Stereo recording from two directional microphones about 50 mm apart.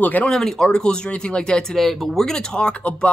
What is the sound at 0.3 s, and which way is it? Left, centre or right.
Speech, centre.